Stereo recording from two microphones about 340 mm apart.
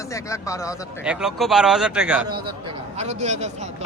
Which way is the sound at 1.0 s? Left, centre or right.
Centre.